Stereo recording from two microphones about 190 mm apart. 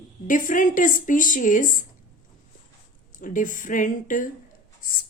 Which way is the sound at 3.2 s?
45° left (ahead or behind).